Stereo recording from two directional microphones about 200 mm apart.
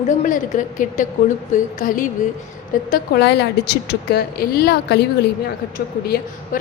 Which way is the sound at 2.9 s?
55° left (ahead or behind).